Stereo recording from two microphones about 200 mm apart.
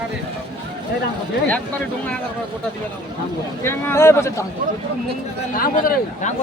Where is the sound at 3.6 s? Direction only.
10° left (ahead or behind).